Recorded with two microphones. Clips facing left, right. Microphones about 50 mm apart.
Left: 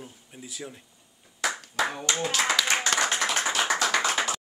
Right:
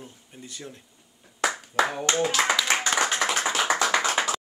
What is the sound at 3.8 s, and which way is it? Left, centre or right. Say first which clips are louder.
Clapping: right 2 dB; right.